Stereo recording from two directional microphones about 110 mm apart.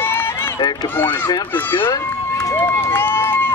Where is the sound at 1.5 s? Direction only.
20° left (ahead or behind).